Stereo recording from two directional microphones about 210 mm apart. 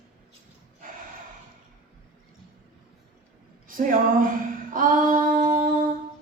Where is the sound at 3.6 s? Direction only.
40° right (ahead or behind).